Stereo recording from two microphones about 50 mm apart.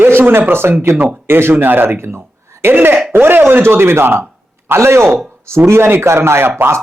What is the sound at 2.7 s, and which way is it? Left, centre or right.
A man's voice, right.